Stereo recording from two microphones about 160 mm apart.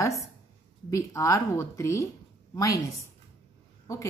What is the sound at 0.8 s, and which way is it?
Speech, 20° left (ahead or behind).